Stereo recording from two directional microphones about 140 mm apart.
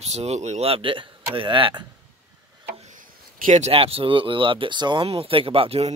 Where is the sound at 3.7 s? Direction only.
45° right (ahead or behind).